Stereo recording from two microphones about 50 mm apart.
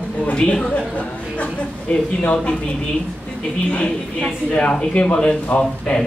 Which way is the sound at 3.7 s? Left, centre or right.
Left.